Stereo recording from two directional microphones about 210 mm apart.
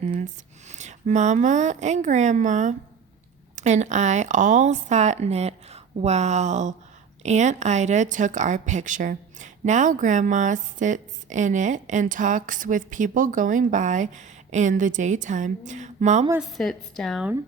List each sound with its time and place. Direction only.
0.7 s speech: 35° right (ahead or behind)
16.4 s a woman's voice: centre (ahead or behind)